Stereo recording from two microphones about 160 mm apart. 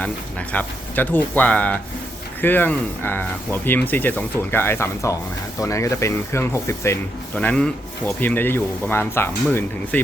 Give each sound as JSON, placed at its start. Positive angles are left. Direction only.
{"t": 0.5, "sound": "speech", "side_deg": 10}
{"t": 7.3, "sound": "speech", "side_deg": 5}